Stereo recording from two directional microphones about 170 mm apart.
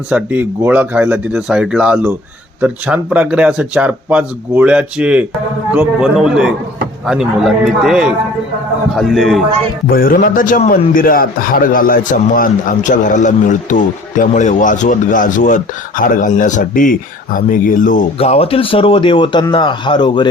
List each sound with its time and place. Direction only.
0.1 s speech: 10° right (ahead or behind)
9.9 s a man's voice: 55° left (ahead or behind)
18.2 s speech: 35° left (ahead or behind)